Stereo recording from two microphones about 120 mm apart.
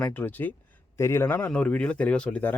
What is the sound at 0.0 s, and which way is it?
Speech, 15° left (ahead or behind).